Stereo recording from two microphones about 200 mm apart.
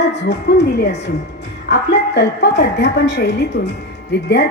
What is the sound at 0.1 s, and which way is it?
A woman's voice, 55° left (ahead or behind).